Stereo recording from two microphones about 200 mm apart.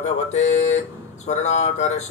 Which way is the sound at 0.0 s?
35° left (ahead or behind).